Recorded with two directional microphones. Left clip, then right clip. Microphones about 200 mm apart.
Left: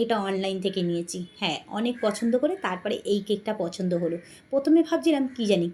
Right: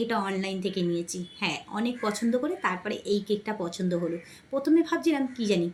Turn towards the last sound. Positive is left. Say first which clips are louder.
# left 3 dB
turn(degrees=15)  # may be behind; listen again after turning